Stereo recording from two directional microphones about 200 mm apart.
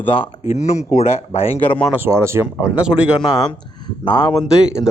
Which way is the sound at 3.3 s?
20° left (ahead or behind).